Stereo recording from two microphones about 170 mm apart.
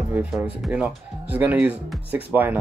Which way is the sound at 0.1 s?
10° right (ahead or behind).